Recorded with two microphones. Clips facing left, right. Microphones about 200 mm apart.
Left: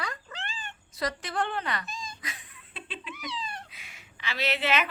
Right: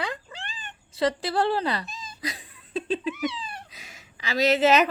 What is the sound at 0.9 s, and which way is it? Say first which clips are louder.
Speech: right 8 dB; 30° right (ahead or behind).